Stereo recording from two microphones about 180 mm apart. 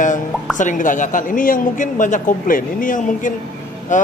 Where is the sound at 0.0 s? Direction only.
45° left (ahead or behind).